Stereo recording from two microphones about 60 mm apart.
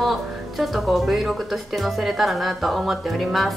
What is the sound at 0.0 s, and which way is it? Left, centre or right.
Speech, centre.